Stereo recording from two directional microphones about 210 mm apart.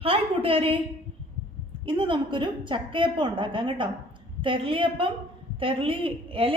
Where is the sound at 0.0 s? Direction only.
25° right (ahead or behind).